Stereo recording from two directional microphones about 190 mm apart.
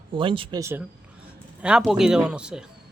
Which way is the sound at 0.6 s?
10° right (ahead or behind).